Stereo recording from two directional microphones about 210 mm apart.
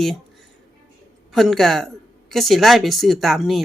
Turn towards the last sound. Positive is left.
turn(degrees=0)  # may be behind; listen again after turning